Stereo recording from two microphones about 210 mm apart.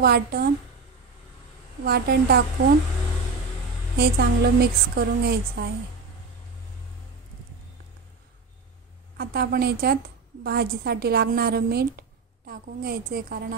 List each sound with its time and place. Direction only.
0.0 s a woman's voice: 45° right (ahead or behind)
1.9 s a woman's voice: 50° right (ahead or behind)
3.9 s a woman's voice: 50° right (ahead or behind)
9.1 s a woman's voice: 45° right (ahead or behind)